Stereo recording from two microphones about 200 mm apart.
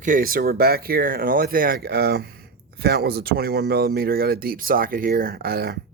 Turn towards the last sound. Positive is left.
turn(degrees=-50)  # may be behind; listen again after turning